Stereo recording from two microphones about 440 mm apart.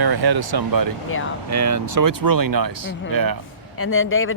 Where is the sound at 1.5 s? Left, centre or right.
Right.